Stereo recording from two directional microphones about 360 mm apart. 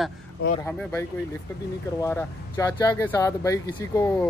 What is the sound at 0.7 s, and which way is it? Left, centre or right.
Speech, centre.